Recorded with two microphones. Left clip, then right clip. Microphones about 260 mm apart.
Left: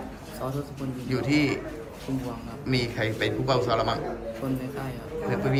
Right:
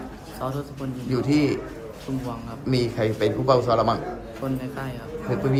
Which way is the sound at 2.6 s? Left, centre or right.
Centre.